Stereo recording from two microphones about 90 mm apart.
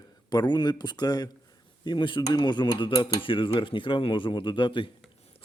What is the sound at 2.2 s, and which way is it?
Cutlery, 55° left (ahead or behind).